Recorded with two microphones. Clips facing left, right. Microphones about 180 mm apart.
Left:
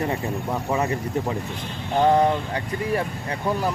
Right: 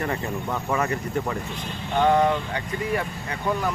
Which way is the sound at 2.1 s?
35° left (ahead or behind).